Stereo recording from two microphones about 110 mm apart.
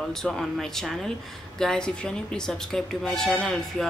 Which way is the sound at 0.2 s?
5° left (ahead or behind).